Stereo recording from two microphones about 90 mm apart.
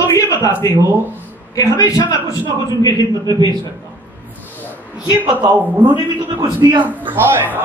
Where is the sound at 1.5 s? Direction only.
40° left (ahead or behind).